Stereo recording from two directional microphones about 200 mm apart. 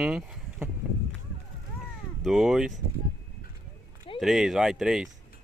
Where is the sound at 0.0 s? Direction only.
5° right (ahead or behind).